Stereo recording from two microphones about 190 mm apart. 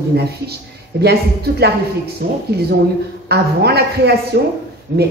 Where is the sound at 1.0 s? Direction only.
60° right (ahead or behind).